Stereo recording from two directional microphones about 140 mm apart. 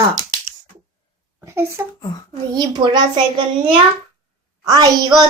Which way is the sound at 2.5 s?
30° right (ahead or behind).